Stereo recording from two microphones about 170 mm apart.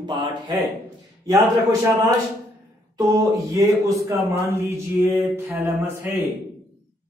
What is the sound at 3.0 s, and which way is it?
Mantra, 20° right (ahead or behind).